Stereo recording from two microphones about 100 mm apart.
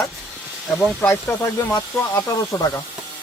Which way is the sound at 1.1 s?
30° left (ahead or behind).